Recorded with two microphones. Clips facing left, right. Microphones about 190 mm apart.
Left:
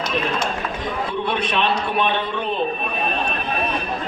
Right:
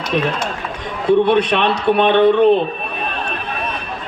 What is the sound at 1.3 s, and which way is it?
A man's voice, 65° right (ahead or behind).